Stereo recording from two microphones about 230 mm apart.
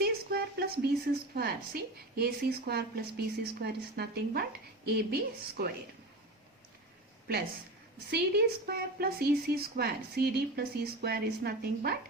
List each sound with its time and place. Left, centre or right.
0.0 s a sound: right
1.4 s a woman's voice: right
8.1 s a woman's voice: right